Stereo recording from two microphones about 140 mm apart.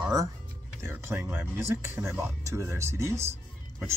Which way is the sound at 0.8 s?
15° right (ahead or behind).